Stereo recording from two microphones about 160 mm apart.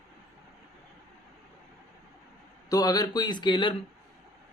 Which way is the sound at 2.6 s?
25° left (ahead or behind).